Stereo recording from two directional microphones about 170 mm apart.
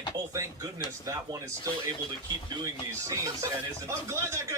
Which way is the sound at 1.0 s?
20° right (ahead or behind).